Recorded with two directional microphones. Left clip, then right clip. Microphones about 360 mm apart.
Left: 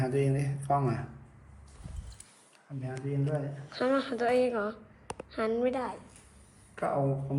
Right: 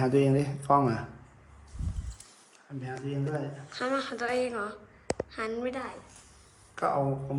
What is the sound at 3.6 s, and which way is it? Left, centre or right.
A woman's voice, centre.